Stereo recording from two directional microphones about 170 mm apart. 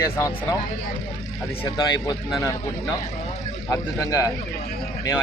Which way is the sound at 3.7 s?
20° left (ahead or behind).